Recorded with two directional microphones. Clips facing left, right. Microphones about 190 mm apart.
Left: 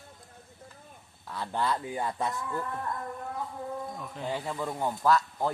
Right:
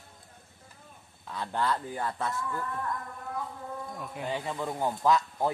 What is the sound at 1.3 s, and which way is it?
A man's voice, 10° left (ahead or behind).